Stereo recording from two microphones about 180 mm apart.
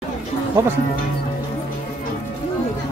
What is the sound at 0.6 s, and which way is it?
Speech, 15° right (ahead or behind).